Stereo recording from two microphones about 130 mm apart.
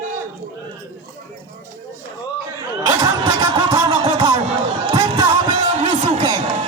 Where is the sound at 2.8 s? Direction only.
30° right (ahead or behind).